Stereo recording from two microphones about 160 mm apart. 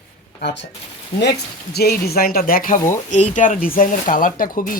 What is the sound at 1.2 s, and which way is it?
Speech, 90° left.